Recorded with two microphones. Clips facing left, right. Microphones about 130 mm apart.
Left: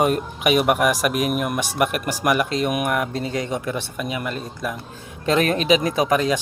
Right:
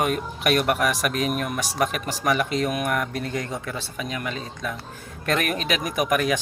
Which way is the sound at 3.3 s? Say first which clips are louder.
Left 5 dB; 90° left.